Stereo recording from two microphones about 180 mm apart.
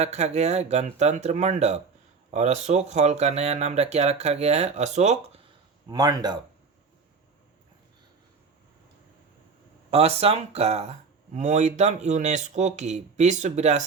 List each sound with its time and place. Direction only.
0.0 s speech: 40° right (ahead or behind)
5.9 s speech: 20° right (ahead or behind)
9.9 s speech: 35° right (ahead or behind)